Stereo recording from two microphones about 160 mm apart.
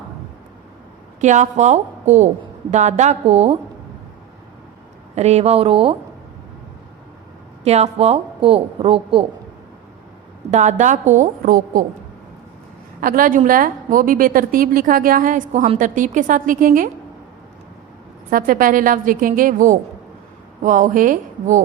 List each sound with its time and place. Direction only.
1.2 s a woman's voice: 50° right (ahead or behind)
5.1 s speech: 45° right (ahead or behind)
7.6 s speech: 40° right (ahead or behind)
10.5 s a woman's voice: 45° right (ahead or behind)
13.0 s a woman's voice: 60° right (ahead or behind); by 15.8 s 45° right (ahead or behind)
15.8 s a woman's voice: 55° right (ahead or behind)
18.3 s a woman's voice: 60° right (ahead or behind)